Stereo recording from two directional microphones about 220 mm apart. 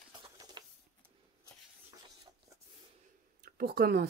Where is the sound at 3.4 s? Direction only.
45° right (ahead or behind).